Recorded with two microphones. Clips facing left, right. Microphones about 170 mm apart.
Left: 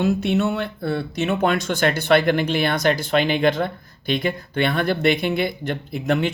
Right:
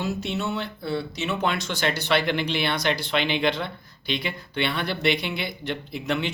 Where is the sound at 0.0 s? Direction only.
55° left (ahead or behind).